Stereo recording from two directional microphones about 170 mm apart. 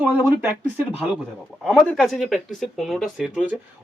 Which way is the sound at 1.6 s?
Centre (ahead or behind).